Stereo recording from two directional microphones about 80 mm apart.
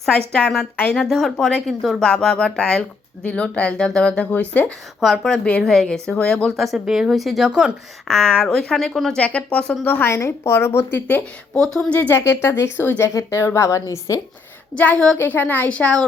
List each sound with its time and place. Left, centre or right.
0.4 s speech: centre
4.9 s speech: centre
8.0 s a woman's voice: centre; by 11.2 s left
11.5 s speech: centre
11.9 s a woman's voice: left
14.8 s speech: centre
15.2 s a woman's voice: left